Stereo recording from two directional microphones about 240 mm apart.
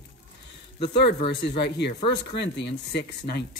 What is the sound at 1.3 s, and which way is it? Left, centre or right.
Speech, left.